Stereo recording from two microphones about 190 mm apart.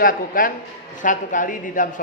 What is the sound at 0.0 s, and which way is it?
A man's voice, 45° left (ahead or behind).